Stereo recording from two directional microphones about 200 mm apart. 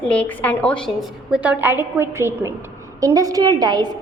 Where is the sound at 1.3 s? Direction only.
5° right (ahead or behind).